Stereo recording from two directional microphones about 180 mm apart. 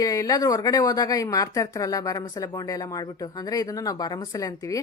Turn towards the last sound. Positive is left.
turn(degrees=20)  # may be behind; listen again after turning